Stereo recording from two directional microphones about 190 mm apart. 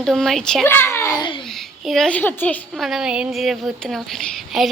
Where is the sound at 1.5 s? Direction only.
Centre (ahead or behind).